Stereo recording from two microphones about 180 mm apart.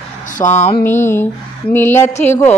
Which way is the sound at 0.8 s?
15° left (ahead or behind).